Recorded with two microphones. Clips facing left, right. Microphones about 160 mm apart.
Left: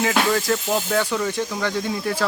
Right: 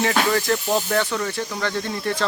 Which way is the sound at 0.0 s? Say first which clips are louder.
Even; 5° left (ahead or behind).